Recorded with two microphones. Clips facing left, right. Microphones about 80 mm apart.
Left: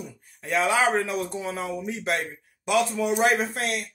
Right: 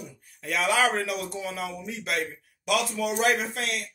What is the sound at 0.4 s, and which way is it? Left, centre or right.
A man's voice, left.